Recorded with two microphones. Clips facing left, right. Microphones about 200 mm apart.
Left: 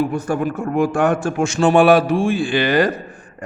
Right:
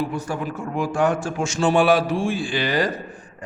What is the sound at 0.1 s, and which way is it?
A man's voice, 50° left (ahead or behind).